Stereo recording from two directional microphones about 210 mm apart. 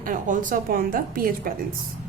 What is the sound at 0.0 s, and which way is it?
A woman's voice, 40° right (ahead or behind).